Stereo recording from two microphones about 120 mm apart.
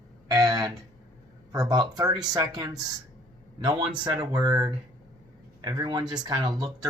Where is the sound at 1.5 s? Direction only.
30° right (ahead or behind).